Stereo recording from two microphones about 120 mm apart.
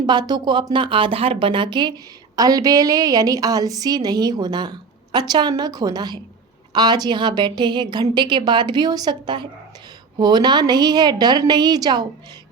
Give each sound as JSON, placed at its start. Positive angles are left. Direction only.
{"t": 0.0, "sound": "speech", "side_deg": -40}